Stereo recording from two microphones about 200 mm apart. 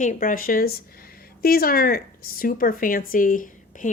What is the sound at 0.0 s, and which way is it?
A woman's voice, 40° left (ahead or behind).